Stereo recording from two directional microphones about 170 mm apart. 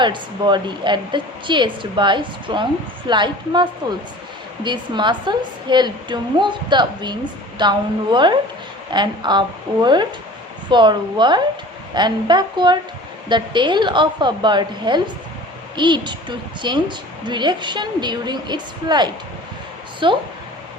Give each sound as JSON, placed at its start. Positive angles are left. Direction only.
{"t": 0.0, "sound": "a woman's voice", "side_deg": -25}